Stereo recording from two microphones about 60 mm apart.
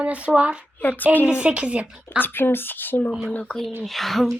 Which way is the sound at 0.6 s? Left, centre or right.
Left.